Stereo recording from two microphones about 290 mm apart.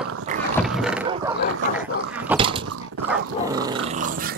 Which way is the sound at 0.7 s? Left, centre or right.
Centre.